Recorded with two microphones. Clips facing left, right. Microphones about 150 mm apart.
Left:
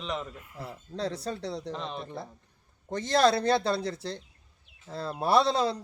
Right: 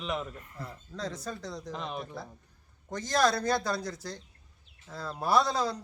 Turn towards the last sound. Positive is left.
turn(degrees=30)  # may be behind; listen again after turning